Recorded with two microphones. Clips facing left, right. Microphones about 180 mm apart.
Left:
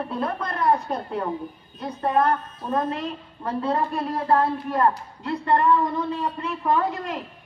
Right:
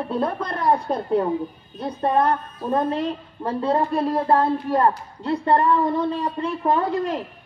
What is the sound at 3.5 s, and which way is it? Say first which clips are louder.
A man's voice: right 3 dB; 30° right (ahead or behind).